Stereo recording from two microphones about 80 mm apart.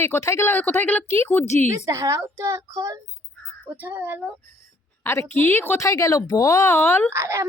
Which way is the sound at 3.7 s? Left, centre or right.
Right.